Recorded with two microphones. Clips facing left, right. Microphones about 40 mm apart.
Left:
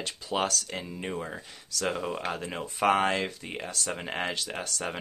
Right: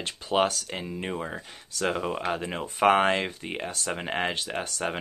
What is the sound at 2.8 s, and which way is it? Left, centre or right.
Speech, right.